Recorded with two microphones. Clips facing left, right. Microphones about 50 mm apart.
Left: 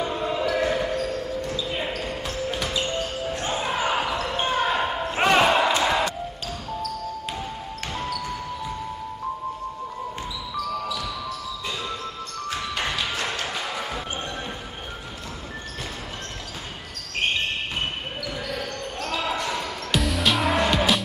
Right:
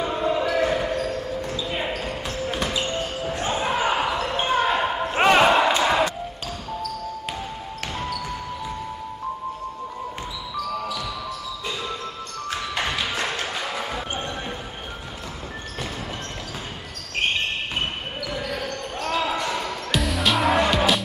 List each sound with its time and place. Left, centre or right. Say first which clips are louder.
0.0 s basketball bounce: right 2 dB; centre
5.8 s music: right 2 dB; centre
12.7 s music: right 2 dB; centre
13.6 s basketball bounce: right 1 dB; centre
18.3 s basketball bounce: right 3 dB; centre